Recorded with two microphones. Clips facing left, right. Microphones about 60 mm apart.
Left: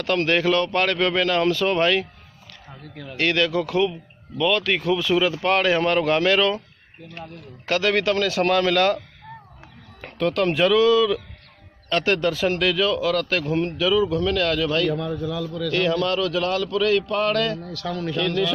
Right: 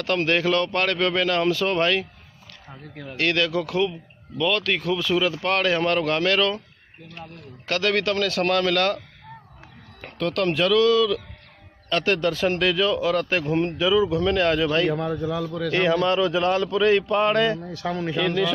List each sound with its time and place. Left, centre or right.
0.0 s speech: centre
3.2 s speech: centre
7.6 s speech: centre
10.0 s speech: centre
11.9 s a man's voice: centre
14.2 s a man's voice: right
15.7 s a man's voice: right
18.1 s a man's voice: centre